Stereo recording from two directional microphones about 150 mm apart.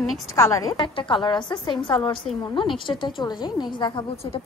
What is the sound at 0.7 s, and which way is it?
A woman's voice, 35° left (ahead or behind).